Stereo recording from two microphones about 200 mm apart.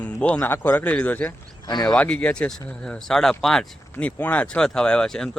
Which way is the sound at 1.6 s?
20° left (ahead or behind).